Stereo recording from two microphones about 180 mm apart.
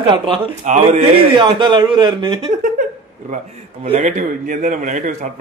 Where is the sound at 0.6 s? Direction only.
40° right (ahead or behind).